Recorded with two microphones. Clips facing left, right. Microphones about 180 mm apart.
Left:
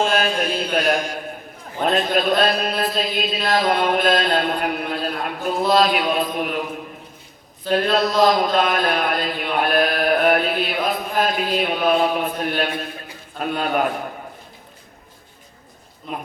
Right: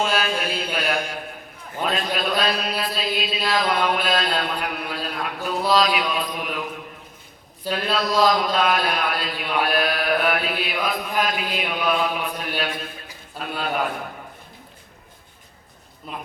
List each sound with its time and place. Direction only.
0.2 s a sound: 50° left (ahead or behind)
1.8 s a man's voice: 45° left (ahead or behind)
7.6 s a man's voice: 10° right (ahead or behind)
8.2 s chant: 50° left (ahead or behind)